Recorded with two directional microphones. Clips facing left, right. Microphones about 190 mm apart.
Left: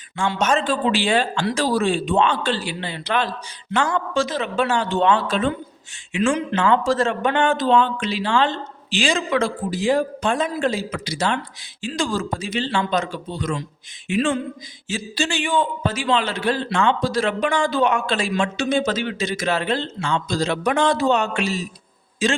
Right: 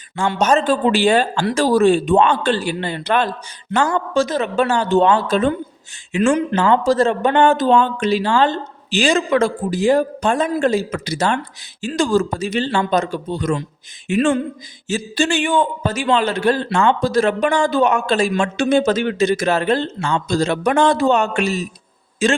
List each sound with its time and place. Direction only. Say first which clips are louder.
0.3 s a man's voice: right 5 dB; 40° right (ahead or behind)
6.6 s a man's voice: right 2 dB; 35° right (ahead or behind)